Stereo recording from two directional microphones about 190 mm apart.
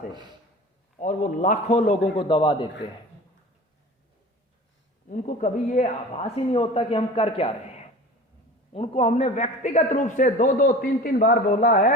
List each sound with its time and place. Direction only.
0.9 s speech: 45° left (ahead or behind); by 2.6 s 30° left (ahead or behind)
5.0 s a man's voice: 40° left (ahead or behind)